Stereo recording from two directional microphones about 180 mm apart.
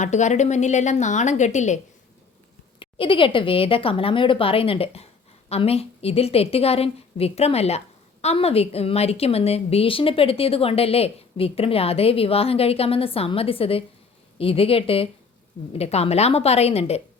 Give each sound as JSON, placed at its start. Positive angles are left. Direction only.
{"t": 0.0, "sound": "a woman's voice", "side_deg": 40}
{"t": 2.7, "sound": "a woman's voice", "side_deg": 30}